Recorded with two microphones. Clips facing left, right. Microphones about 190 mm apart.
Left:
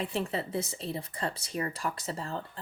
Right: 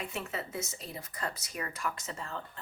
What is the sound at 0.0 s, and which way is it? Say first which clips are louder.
Speech: left 6 dB; 30° left (ahead or behind).